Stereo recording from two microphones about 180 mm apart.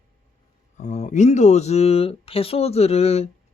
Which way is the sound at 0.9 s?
40° left (ahead or behind).